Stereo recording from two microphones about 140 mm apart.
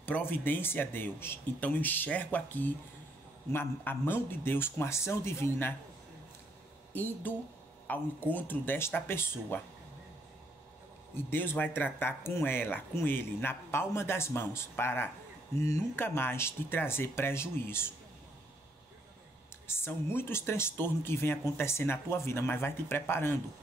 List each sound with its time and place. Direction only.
0.0 s speech: 15° left (ahead or behind)
6.9 s speech: 15° left (ahead or behind)
11.1 s speech: 15° left (ahead or behind)
19.7 s speech: 15° left (ahead or behind)